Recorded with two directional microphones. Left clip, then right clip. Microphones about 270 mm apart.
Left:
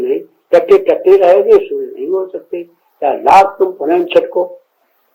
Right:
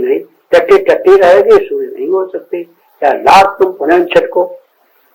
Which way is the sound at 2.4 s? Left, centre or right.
Left.